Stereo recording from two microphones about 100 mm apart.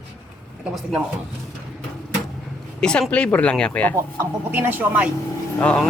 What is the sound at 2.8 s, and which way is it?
Speech, 10° left (ahead or behind).